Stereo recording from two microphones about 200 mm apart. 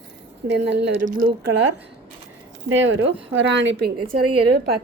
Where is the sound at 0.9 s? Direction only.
45° right (ahead or behind).